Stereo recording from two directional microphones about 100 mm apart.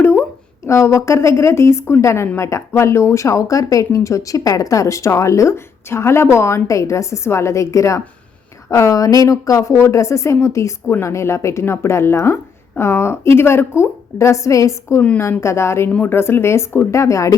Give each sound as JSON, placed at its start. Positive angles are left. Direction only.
{"t": 0.0, "sound": "a sound", "side_deg": 20}
{"t": 0.7, "sound": "a woman's voice", "side_deg": 30}
{"t": 15.9, "sound": "speech", "side_deg": 15}
{"t": 16.1, "sound": "a woman's voice", "side_deg": 25}